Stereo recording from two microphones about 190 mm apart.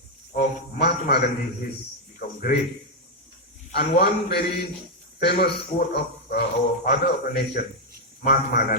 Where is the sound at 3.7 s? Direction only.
60° left (ahead or behind).